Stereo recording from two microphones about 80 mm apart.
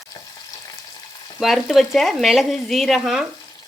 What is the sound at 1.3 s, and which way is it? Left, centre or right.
Speech, centre.